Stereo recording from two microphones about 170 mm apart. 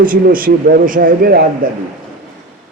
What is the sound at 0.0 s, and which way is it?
A man's voice, 55° right (ahead or behind).